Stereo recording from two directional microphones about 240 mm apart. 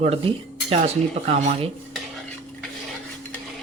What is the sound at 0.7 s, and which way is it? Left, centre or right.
Speech, right.